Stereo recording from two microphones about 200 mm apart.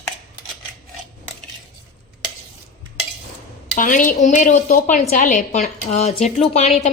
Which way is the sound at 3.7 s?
40° left (ahead or behind).